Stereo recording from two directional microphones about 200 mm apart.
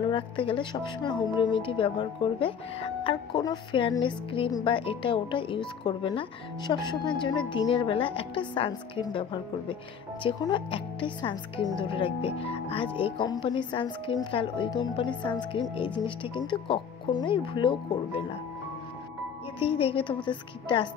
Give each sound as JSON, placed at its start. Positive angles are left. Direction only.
{"t": 0.1, "sound": "speech", "side_deg": 25}
{"t": 19.6, "sound": "speech", "side_deg": 30}